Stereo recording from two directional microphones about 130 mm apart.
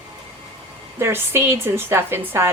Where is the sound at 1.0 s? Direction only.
20° right (ahead or behind).